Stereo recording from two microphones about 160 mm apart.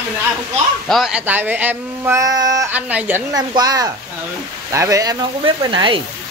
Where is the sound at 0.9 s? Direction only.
5° right (ahead or behind); by 2.6 s 25° right (ahead or behind).